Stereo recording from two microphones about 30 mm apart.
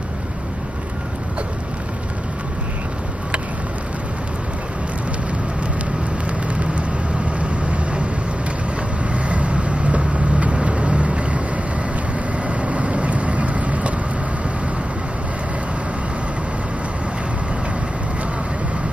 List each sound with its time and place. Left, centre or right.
6.4 s vehicle: right
9.3 s vehicle: right